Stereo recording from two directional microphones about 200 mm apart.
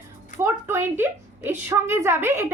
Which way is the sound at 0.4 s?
10° right (ahead or behind).